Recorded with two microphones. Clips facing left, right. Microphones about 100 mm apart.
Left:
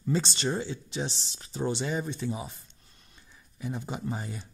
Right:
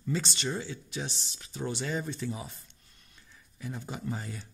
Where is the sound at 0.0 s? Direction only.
30° left (ahead or behind).